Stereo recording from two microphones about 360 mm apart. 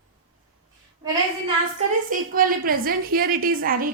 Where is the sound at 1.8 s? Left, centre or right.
Right.